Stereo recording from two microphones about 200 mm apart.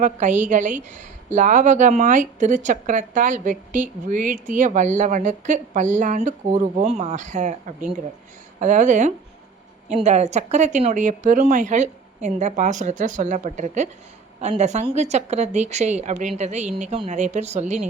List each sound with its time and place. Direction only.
0.0 s a woman's voice: 40° right (ahead or behind)